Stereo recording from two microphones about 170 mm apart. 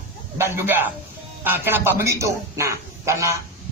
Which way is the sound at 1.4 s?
10° right (ahead or behind).